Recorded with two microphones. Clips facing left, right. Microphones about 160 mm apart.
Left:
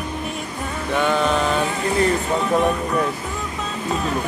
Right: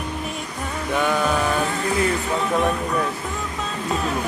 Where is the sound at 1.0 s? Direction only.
5° right (ahead or behind).